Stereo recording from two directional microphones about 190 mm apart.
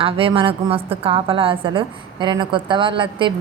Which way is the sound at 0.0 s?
30° right (ahead or behind).